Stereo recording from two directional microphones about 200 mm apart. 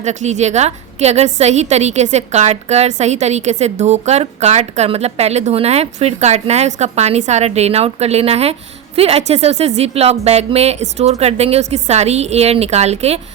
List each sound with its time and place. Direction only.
0.0 s a woman's voice: 35° right (ahead or behind)